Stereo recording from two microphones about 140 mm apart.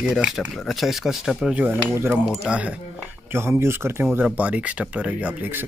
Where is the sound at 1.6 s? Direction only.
15° right (ahead or behind).